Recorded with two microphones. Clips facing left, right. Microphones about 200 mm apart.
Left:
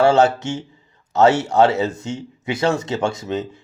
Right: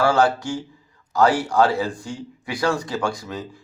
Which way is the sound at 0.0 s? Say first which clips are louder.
Left 4 dB; 25° left (ahead or behind).